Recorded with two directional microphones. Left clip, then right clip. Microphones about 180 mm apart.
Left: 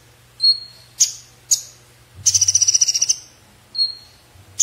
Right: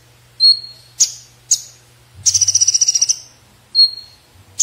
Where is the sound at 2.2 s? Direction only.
10° left (ahead or behind).